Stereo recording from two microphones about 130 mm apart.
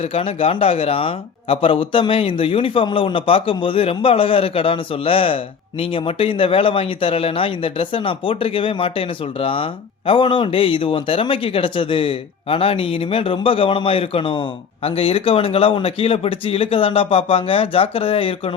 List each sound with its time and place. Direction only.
0.0 s speech: 50° left (ahead or behind)